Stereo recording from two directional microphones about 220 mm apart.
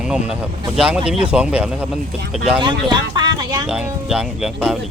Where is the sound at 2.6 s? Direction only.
20° right (ahead or behind).